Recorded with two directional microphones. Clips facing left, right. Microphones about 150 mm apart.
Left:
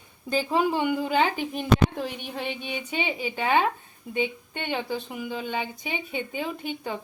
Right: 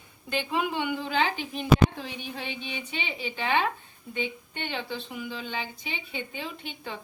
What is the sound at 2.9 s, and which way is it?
Speech, 45° left (ahead or behind).